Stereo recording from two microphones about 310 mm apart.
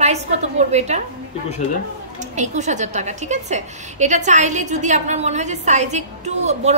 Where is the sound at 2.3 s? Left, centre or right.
Right.